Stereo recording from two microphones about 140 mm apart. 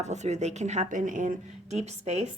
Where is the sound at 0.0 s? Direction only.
55° right (ahead or behind).